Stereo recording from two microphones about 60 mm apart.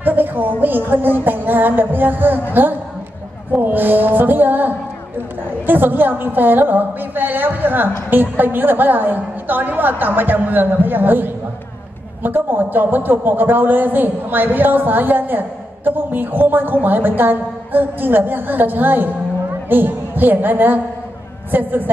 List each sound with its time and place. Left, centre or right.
0.0 s a woman's voice: right
3.5 s a sound: right
5.7 s a man's voice: right